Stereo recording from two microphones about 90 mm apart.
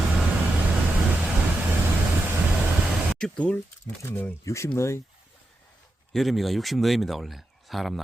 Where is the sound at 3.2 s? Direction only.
15° left (ahead or behind).